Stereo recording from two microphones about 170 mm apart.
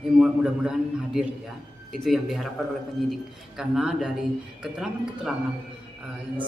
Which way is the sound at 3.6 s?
5° right (ahead or behind).